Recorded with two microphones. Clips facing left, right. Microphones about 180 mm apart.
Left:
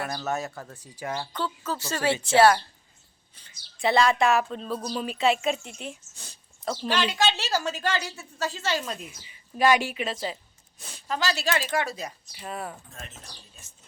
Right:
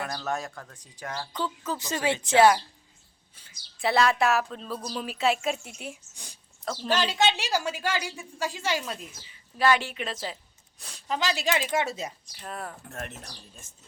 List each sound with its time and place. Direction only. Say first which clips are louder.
0.0 s speech: left 2 dB; 5° left (ahead or behind)
1.3 s a woman's voice: even; 15° right (ahead or behind)
3.8 s speech: left 2 dB; 5° right (ahead or behind)
6.8 s a woman's voice: right 1 dB; 45° right (ahead or behind)
7.1 s a woman's voice: even; 20° right (ahead or behind)
9.0 s speech: left 2 dB; 15° left (ahead or behind)
10.8 s a sound: left 2 dB; centre (ahead or behind)
11.1 s a woman's voice: even; 15° right (ahead or behind)
12.2 s speech: left 2 dB; 5° left (ahead or behind)
12.8 s speech: right 7 dB; 65° right (ahead or behind)
13.6 s a woman's voice: right 1 dB; 50° right (ahead or behind)